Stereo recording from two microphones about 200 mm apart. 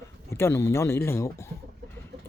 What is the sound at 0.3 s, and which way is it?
Speech, 15° left (ahead or behind).